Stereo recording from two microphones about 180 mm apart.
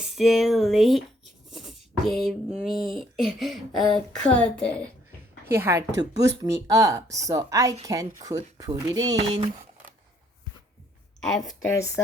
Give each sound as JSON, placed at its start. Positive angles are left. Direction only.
{"t": 0.0, "sound": "speech", "side_deg": 0}
{"t": 5.5, "sound": "speech", "side_deg": -15}
{"t": 11.2, "sound": "speech", "side_deg": 0}